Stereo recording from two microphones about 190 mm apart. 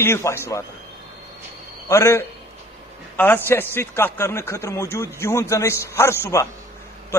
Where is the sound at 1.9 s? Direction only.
10° left (ahead or behind).